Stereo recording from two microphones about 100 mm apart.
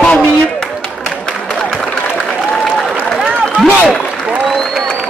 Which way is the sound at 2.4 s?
5° left (ahead or behind).